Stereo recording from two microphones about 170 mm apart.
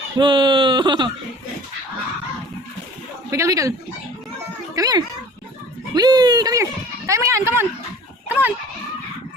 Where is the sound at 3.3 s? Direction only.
20° right (ahead or behind).